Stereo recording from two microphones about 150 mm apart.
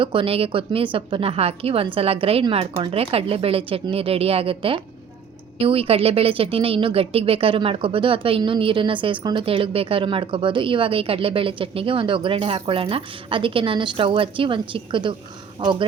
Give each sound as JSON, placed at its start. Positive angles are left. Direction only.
{"t": 0.0, "sound": "a woman's voice", "side_deg": -35}